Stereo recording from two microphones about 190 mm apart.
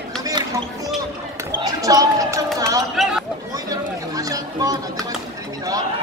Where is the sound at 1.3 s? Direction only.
20° right (ahead or behind).